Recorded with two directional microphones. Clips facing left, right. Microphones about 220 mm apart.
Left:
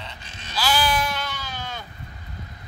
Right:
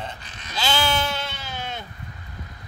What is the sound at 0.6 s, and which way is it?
Bleat, 25° right (ahead or behind).